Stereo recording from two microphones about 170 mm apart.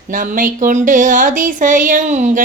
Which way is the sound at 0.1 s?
50° right (ahead or behind).